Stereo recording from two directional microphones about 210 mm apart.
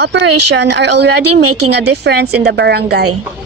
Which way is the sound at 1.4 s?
90° right.